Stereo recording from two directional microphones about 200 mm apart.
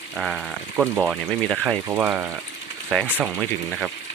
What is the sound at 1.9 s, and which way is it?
Speech, 10° right (ahead or behind).